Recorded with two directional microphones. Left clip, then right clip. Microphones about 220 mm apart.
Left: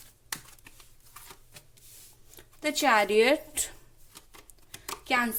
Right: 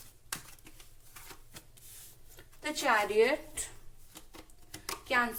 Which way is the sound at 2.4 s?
45° left (ahead or behind).